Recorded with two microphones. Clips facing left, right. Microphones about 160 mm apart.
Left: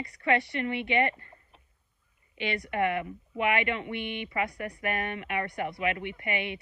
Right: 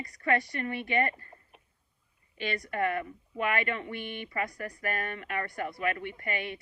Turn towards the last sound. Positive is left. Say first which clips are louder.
# left 2 dB
turn(degrees=20)  # may be behind; listen again after turning